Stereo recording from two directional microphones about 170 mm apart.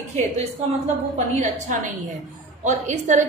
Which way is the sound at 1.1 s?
40° right (ahead or behind).